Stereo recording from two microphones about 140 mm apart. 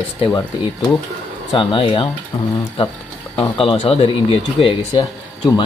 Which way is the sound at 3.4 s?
40° left (ahead or behind).